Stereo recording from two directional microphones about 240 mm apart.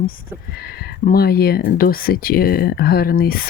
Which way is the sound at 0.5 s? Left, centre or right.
Left.